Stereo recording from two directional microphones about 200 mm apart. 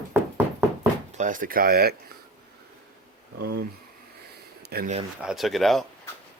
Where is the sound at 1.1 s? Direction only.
40° right (ahead or behind).